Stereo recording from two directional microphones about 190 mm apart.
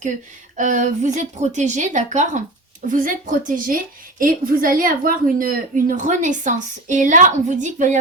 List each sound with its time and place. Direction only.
0.5 s a woman's voice: 40° right (ahead or behind)